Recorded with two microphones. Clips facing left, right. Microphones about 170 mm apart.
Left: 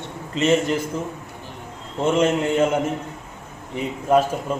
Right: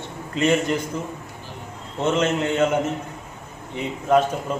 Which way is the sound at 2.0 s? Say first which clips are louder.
Left 2 dB; 10° left (ahead or behind).